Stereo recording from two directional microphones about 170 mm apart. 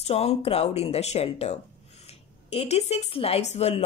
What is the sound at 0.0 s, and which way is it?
Speech, 35° left (ahead or behind).